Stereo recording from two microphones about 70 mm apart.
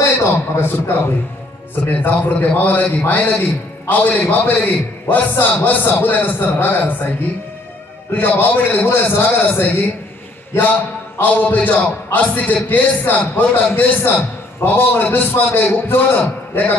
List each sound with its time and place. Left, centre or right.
0.0 s a man's voice: left